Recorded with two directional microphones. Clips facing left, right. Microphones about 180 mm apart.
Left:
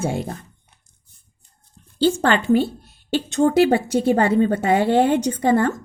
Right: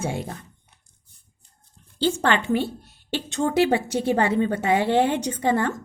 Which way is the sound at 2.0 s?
40° left (ahead or behind).